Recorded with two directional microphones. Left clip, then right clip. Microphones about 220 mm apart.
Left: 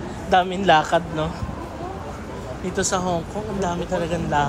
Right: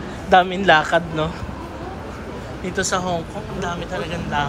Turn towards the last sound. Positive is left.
turn(degrees=30)  # may be behind; listen again after turning